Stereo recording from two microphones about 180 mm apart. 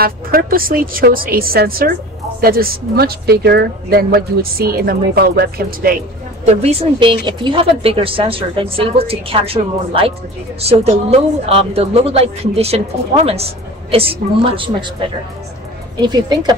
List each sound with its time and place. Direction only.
0.0 s speech: 55° right (ahead or behind)
6.4 s speech: 35° right (ahead or behind)
16.0 s a woman's voice: 25° right (ahead or behind)